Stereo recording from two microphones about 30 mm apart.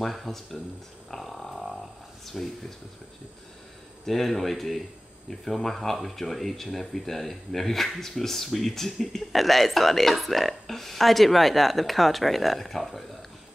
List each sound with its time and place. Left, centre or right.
0.3 s speech: centre
1.1 s a sound: centre
2.2 s a man's voice: centre
4.0 s a man's voice: centre